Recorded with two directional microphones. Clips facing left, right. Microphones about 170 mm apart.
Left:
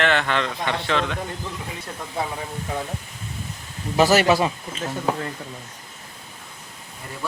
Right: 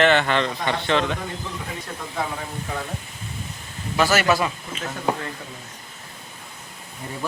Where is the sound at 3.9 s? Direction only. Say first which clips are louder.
Left 3 dB; 35° left (ahead or behind).